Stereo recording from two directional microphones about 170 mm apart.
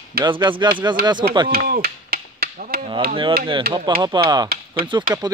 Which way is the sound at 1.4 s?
65° right (ahead or behind).